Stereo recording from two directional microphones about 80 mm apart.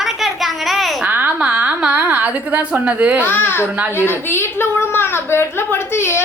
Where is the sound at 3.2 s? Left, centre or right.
Left.